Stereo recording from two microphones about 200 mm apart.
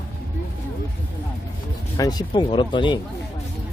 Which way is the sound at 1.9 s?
20° left (ahead or behind).